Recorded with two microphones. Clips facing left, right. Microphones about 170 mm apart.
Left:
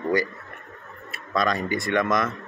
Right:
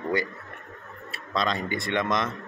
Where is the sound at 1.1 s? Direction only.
25° right (ahead or behind).